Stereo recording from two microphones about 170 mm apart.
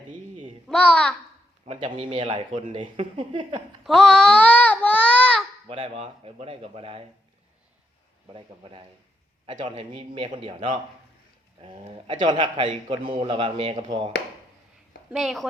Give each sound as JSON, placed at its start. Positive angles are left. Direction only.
{"t": 0.1, "sound": "a sound", "side_deg": -30}
{"t": 0.7, "sound": "a child's voice", "side_deg": 5}
{"t": 1.6, "sound": "speech", "side_deg": -35}
{"t": 3.8, "sound": "speech", "side_deg": 5}
{"t": 5.6, "sound": "speech", "side_deg": -30}
{"t": 8.3, "sound": "a man's voice", "side_deg": -30}
{"t": 15.1, "sound": "a woman's voice", "side_deg": 0}